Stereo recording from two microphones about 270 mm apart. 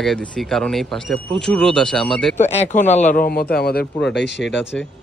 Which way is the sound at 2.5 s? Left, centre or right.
Left.